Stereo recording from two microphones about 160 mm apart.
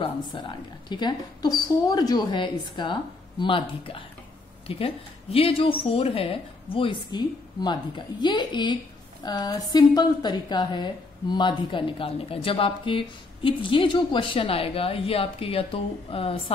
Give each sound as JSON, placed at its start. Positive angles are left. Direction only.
{"t": 0.0, "sound": "a woman's voice", "side_deg": 30}